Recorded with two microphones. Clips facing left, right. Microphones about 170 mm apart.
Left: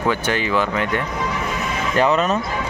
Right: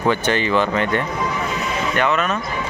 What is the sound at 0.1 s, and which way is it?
Speech, 5° left (ahead or behind).